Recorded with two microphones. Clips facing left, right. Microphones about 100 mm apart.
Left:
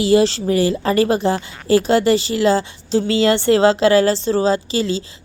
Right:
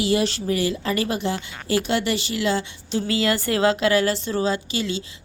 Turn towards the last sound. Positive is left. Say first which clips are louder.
# left 7 dB
turn(degrees=35)  # may be behind; listen again after turning